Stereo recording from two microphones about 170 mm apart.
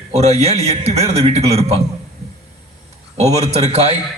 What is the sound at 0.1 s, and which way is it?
A man's voice, 40° right (ahead or behind).